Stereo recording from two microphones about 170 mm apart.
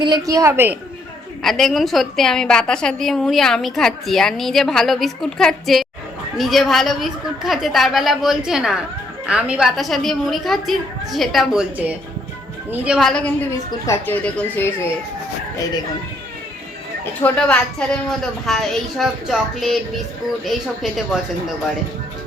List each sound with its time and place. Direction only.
0.0 s a woman's voice: 20° right (ahead or behind)
1.4 s a woman's voice: centre (ahead or behind)
12.8 s a woman's voice: centre (ahead or behind)
13.7 s speech: 15° left (ahead or behind)
17.2 s a woman's voice: 5° left (ahead or behind)